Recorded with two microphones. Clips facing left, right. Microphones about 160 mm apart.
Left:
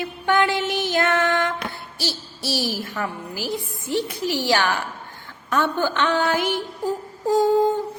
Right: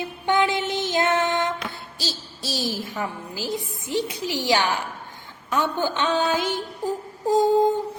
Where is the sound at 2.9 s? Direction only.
15° right (ahead or behind).